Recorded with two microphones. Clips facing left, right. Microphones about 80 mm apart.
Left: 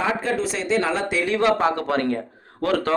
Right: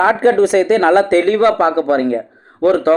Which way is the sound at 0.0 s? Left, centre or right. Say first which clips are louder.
Right 12 dB; right.